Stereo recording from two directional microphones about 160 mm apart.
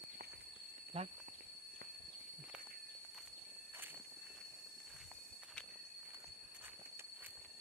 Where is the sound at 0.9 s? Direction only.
40° right (ahead or behind).